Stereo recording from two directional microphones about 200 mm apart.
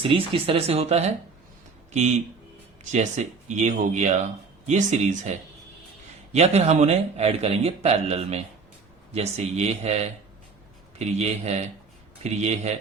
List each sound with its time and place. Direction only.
0.0 s speech: 25° right (ahead or behind)
3.2 s a man's voice: 35° right (ahead or behind)
6.3 s a man's voice: 35° right (ahead or behind)